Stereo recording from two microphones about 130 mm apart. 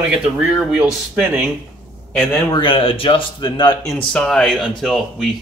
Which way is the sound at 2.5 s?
40° left (ahead or behind).